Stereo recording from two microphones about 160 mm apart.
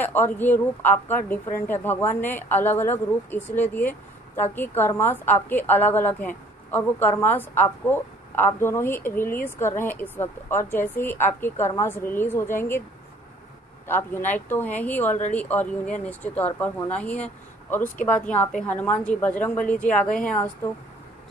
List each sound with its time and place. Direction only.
0.0 s a woman's voice: 10° left (ahead or behind)
13.8 s a woman's voice: 15° left (ahead or behind)